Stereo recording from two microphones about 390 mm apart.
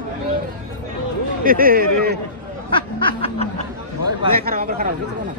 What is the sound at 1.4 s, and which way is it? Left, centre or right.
Speech, right.